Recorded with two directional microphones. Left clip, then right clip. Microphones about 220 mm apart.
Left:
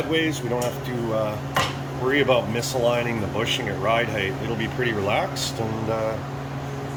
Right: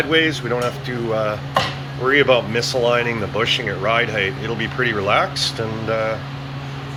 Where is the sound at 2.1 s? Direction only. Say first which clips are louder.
Right 5 dB; 10° left (ahead or behind).